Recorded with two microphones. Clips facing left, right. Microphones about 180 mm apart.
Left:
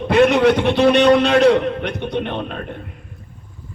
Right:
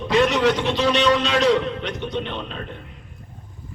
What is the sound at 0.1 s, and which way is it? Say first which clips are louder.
A man's voice: left 5 dB; 60° left (ahead or behind).